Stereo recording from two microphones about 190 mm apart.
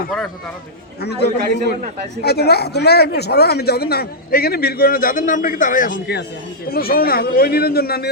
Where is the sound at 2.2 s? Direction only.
55° left (ahead or behind).